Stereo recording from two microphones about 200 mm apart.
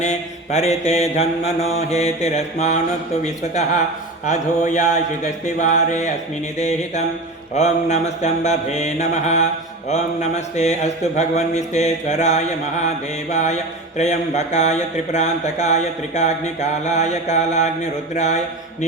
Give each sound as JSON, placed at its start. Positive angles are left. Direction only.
{"t": 0.0, "sound": "mantra", "side_deg": 35}
{"t": 0.9, "sound": "speech", "side_deg": 35}